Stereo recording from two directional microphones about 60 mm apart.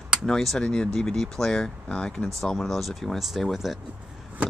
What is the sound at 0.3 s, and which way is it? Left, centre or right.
Speech, centre.